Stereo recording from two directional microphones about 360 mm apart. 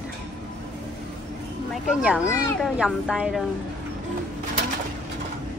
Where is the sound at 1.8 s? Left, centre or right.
Centre.